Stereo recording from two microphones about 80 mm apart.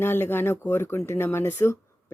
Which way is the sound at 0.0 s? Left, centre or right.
Left.